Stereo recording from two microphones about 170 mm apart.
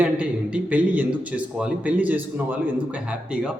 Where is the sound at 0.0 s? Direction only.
5° right (ahead or behind).